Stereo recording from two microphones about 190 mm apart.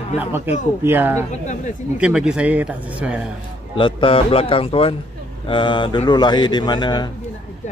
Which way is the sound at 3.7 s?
25° left (ahead or behind).